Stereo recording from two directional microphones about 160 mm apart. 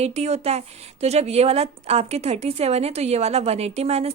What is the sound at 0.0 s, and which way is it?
A woman's voice, 45° right (ahead or behind).